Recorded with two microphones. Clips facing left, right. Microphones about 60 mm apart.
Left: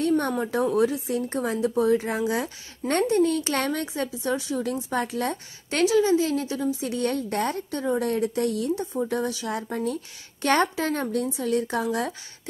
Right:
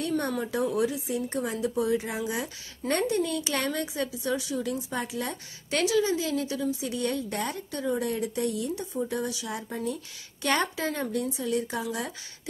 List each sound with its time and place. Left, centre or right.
0.5 s a woman's voice: left
10.4 s a woman's voice: left